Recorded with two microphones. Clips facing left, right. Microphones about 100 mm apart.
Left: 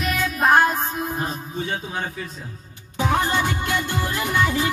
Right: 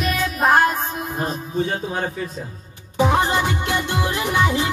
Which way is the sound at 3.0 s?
10° right (ahead or behind).